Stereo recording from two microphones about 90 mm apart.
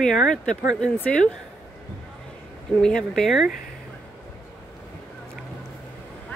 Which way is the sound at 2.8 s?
5° left (ahead or behind).